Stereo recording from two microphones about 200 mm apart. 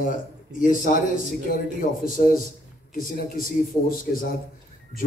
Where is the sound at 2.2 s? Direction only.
45° left (ahead or behind).